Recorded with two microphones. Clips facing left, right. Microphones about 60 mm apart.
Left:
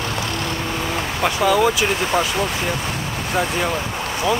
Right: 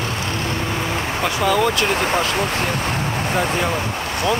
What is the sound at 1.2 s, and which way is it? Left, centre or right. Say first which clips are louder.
Speech: left 2 dB; centre.